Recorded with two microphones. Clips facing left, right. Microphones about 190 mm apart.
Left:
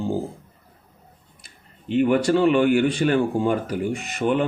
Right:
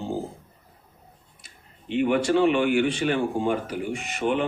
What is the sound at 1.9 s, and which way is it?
Speech, 40° left (ahead or behind).